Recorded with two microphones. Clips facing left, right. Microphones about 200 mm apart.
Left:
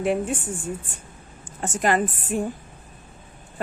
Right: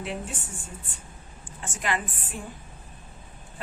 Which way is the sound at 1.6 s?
40° left (ahead or behind).